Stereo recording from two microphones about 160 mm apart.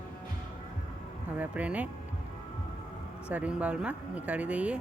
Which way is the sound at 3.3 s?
10° right (ahead or behind).